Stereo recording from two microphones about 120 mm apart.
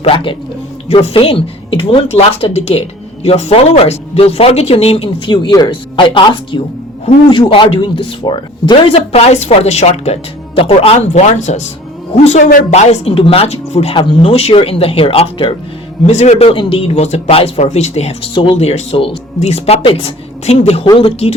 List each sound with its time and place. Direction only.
0.0 s speech: 45° left (ahead or behind)
9.1 s speech: 65° left (ahead or behind); by 11.6 s 80° left
12.1 s speech: 60° left (ahead or behind)
13.9 s speech: 45° left (ahead or behind)
16.0 s speech: 70° left (ahead or behind)
17.6 s speech: 70° left (ahead or behind)
20.8 s speech: 40° left (ahead or behind)